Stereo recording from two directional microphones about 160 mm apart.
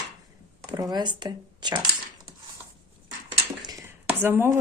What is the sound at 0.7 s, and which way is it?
Speech, 25° right (ahead or behind).